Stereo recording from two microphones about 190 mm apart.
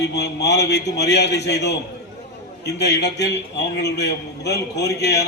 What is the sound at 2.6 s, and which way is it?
A man's voice, 65° left (ahead or behind).